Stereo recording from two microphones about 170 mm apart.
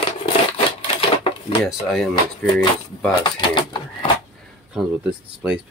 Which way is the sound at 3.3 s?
30° left (ahead or behind).